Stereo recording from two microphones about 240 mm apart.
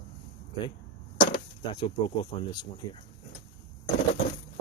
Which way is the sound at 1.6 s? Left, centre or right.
Centre.